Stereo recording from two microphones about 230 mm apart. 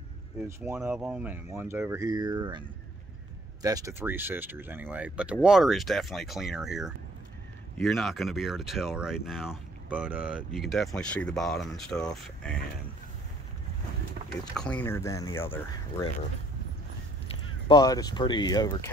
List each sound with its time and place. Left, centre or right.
0.5 s speech: centre
3.6 s speech: centre
14.5 s speech: centre
17.6 s speech: centre